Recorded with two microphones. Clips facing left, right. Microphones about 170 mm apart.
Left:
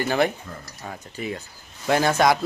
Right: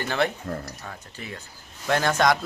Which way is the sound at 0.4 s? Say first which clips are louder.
Right 7 dB; 55° right (ahead or behind).